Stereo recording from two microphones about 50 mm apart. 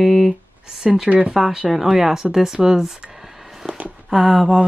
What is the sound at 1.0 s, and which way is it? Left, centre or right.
Speech, right.